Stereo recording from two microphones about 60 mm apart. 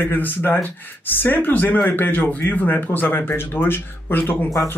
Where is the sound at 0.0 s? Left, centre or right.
Left.